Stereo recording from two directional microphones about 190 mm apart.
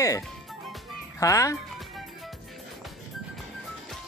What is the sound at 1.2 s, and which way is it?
Speech, 15° left (ahead or behind).